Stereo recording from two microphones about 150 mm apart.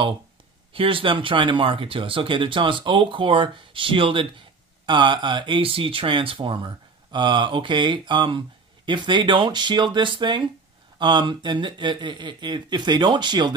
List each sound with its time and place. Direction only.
0.7 s speech: 35° right (ahead or behind)